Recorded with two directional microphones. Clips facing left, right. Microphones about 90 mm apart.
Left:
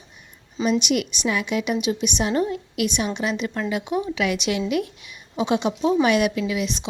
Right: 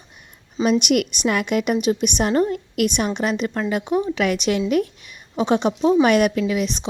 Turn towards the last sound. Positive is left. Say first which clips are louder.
# right 3 dB
turn(degrees=-40)  # may be behind; listen again after turning